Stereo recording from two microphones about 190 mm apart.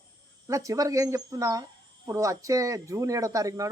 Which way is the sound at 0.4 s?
15° right (ahead or behind).